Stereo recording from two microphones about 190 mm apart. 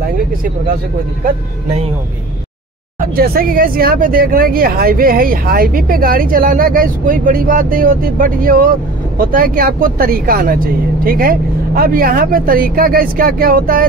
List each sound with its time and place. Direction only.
3.0 s speech: 50° right (ahead or behind)